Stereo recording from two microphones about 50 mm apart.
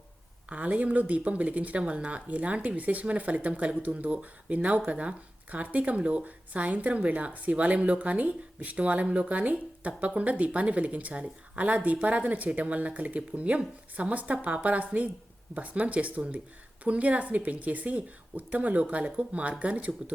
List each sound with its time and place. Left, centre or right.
0.5 s speech: right